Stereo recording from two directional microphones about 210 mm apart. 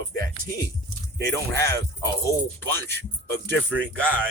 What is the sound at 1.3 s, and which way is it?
Speech, 15° left (ahead or behind).